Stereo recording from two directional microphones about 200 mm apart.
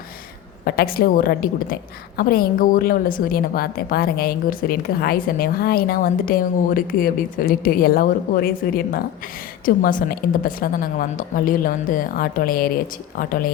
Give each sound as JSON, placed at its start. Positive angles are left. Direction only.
{"t": 0.6, "sound": "a woman's voice", "side_deg": 50}